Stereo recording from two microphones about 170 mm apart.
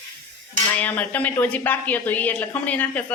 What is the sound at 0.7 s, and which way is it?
Speech, 10° left (ahead or behind).